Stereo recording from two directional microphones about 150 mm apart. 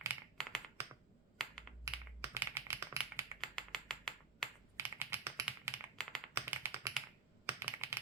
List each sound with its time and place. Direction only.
0.4 s computer keyboard: 5° left (ahead or behind)
1.8 s a sound: 15° right (ahead or behind)
3.4 s finger snapping: 5° left (ahead or behind)
4.8 s typing: 15° right (ahead or behind)
6.0 s typing: 5° left (ahead or behind)
6.3 s tap: 15° right (ahead or behind)
7.4 s computer keyboard: 15° right (ahead or behind)